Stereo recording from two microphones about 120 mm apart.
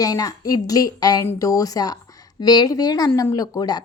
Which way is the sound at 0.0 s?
30° left (ahead or behind).